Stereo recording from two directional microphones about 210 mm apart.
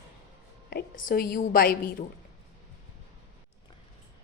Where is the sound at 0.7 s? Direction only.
45° left (ahead or behind).